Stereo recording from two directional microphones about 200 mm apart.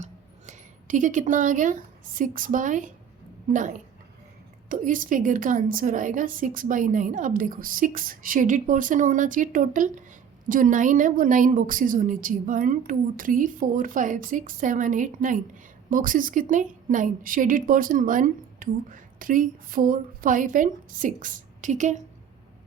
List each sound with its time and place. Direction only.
0.0 s a woman's voice: 40° right (ahead or behind)